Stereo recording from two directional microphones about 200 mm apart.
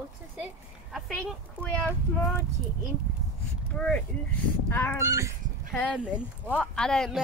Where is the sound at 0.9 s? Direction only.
5° left (ahead or behind).